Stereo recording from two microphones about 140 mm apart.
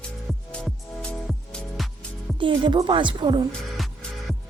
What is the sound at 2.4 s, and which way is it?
A woman's voice, 40° right (ahead or behind).